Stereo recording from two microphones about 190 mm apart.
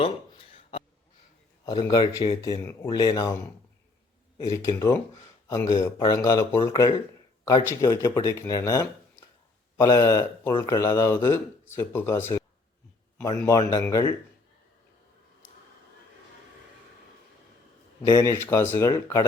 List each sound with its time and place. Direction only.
1.6 s speech: 20° left (ahead or behind)
4.4 s speech: 15° left (ahead or behind)
13.4 s speech: 15° left (ahead or behind)
18.0 s speech: 20° left (ahead or behind)